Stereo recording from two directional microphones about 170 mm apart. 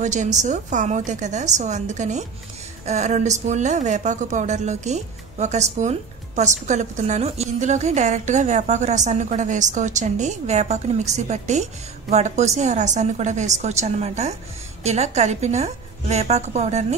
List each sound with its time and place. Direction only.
0.0 s a woman's voice: 45° right (ahead or behind)